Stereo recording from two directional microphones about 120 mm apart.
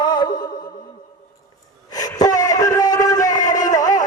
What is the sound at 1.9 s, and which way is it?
Gasp, 30° left (ahead or behind).